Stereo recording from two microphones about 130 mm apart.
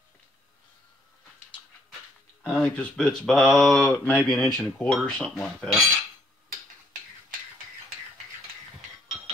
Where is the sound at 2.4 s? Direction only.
10° left (ahead or behind).